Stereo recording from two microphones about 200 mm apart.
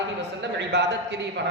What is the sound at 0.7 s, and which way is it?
Speech, 60° right (ahead or behind).